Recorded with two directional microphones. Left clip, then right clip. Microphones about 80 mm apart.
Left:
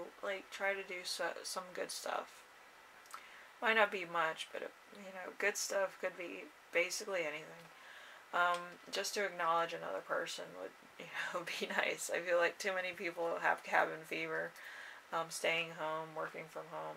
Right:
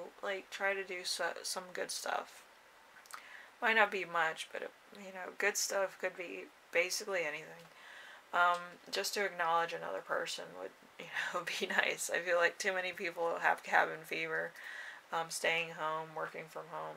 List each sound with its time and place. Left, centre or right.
0.2 s speech: right
3.6 s speech: right